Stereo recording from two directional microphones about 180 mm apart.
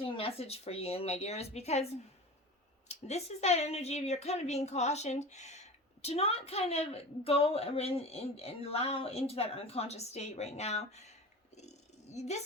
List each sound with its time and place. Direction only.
0.0 s speech: 30° left (ahead or behind)
2.9 s speech: 35° left (ahead or behind)
11.5 s purr: 40° left (ahead or behind)